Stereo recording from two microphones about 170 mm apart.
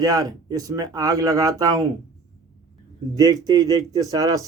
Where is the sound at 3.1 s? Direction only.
20° right (ahead or behind).